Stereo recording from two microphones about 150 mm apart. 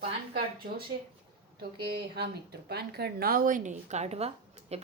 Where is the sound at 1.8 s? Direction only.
90° right.